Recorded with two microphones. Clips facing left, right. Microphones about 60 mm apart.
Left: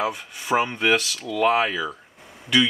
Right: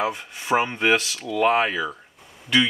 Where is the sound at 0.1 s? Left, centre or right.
Centre.